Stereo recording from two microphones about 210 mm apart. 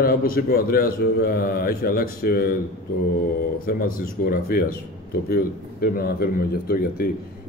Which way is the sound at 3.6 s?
45° left (ahead or behind).